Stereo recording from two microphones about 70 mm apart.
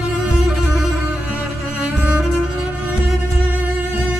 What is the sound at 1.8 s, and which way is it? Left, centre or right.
Cello, right.